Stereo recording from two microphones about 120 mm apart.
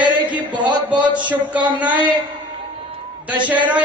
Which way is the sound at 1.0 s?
40° right (ahead or behind).